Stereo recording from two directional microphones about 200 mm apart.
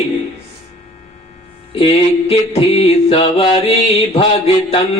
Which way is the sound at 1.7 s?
30° left (ahead or behind).